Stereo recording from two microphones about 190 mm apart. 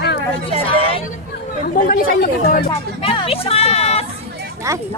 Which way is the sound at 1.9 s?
45° left (ahead or behind).